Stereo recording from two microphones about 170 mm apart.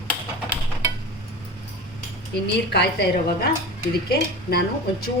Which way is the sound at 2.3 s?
70° left (ahead or behind).